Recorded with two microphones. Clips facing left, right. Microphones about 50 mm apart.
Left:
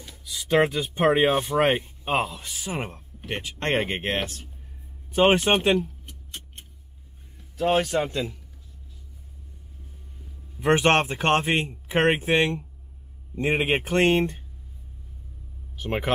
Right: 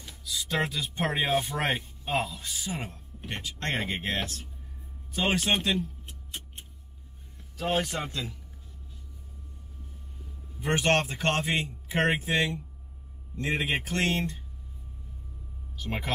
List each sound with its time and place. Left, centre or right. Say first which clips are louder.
0.2 s speech: left 8 dB; left
5.8 s tick-tock: left 4 dB; centre
7.5 s a man's voice: left 7 dB; centre
10.6 s speech: left 6 dB; left
15.8 s speech: left 6 dB; left